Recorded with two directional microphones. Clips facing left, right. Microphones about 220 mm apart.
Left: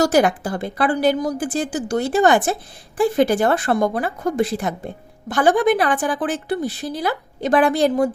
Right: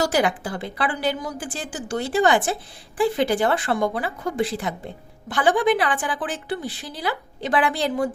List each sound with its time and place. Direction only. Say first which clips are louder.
0.0 s a woman's voice: left 5 dB; 45° left (ahead or behind)